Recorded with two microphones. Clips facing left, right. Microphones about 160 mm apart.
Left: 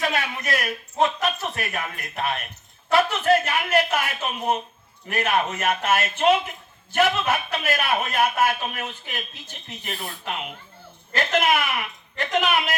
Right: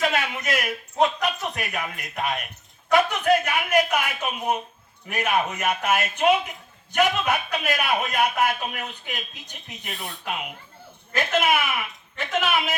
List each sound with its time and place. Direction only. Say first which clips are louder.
0.0 s a man's voice: right 1 dB; 20° right (ahead or behind)
9.9 s speech: left 2 dB; centre (ahead or behind)
10.2 s a man's voice: right 2 dB; 10° right (ahead or behind)